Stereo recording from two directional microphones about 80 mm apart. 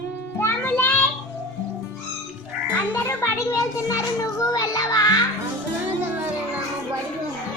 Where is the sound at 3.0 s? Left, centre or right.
Left.